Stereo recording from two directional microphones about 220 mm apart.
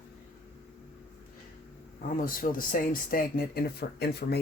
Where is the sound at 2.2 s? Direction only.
40° left (ahead or behind).